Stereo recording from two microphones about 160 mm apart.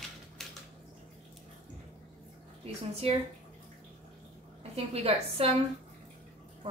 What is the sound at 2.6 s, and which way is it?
Speech, 40° right (ahead or behind).